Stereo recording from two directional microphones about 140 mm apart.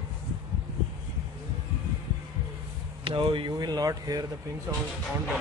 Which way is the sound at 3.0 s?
35° right (ahead or behind).